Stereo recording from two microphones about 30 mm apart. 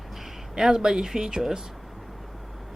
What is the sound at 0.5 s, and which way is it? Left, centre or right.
Speech, right.